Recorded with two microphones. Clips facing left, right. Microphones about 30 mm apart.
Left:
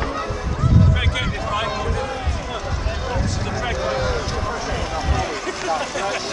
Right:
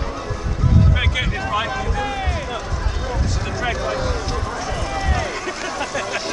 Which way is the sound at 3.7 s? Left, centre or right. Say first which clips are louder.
Left 1 dB; centre.